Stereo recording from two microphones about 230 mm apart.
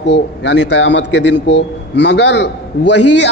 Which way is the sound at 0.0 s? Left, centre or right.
Left.